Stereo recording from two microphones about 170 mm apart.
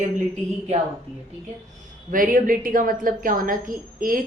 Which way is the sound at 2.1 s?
55° right (ahead or behind).